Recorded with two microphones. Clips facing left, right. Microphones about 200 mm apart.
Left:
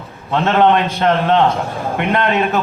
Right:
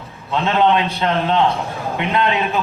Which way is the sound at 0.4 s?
55° left (ahead or behind).